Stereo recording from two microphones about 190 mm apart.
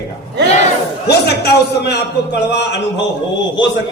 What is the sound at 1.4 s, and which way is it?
Speech, 60° left (ahead or behind).